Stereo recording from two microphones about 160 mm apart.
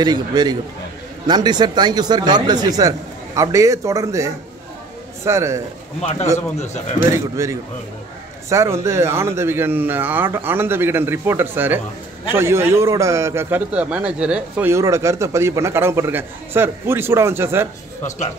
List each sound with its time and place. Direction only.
0.0 s a man's voice: 25° right (ahead or behind)
6.3 s speech: 45° left (ahead or behind)
7.1 s a man's voice: 20° right (ahead or behind)